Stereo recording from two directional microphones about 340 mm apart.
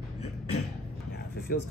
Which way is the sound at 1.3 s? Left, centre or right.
Left.